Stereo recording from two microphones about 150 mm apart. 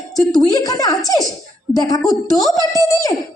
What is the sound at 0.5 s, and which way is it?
A woman's voice, 25° left (ahead or behind).